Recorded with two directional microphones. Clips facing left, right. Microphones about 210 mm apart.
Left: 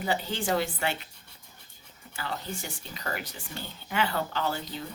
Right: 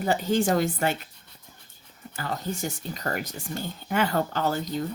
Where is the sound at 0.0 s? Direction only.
45° right (ahead or behind).